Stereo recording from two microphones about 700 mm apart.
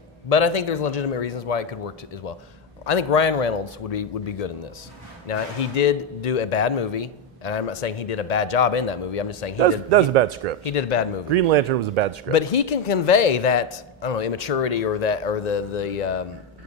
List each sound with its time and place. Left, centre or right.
0.3 s speech: left
2.8 s speech: left
9.8 s a man's voice: right
10.6 s a man's voice: left
11.3 s speech: right
12.3 s a man's voice: left